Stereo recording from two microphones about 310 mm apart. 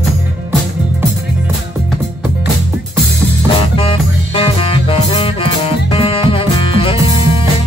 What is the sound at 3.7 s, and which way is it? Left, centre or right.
Music, centre.